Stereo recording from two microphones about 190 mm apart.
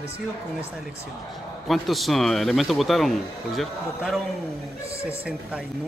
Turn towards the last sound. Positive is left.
turn(degrees=0)  # may be behind; listen again after turning